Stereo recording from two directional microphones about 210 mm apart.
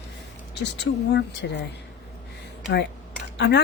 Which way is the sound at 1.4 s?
50° left (ahead or behind).